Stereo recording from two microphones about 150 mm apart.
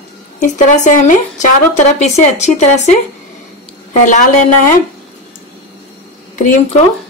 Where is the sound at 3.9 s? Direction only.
55° left (ahead or behind).